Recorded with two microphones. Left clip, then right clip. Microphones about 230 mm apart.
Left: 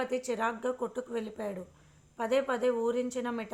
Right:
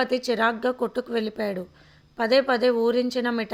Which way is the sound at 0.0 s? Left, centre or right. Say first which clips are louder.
Right 9 dB; right.